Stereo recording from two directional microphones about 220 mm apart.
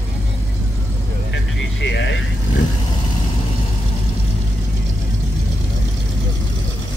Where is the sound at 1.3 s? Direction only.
50° left (ahead or behind).